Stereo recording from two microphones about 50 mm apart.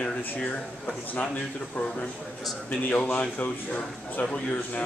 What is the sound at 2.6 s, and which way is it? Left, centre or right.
A man's voice, left.